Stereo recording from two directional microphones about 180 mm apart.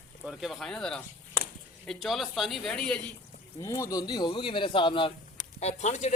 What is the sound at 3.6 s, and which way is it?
Speech, 15° left (ahead or behind).